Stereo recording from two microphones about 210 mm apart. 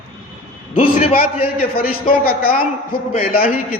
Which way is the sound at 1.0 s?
30° left (ahead or behind).